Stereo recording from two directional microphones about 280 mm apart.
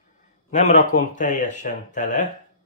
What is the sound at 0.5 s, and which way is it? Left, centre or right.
Speech, left.